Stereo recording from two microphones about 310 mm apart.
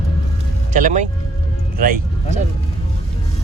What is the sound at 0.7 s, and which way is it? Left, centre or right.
Speech, right.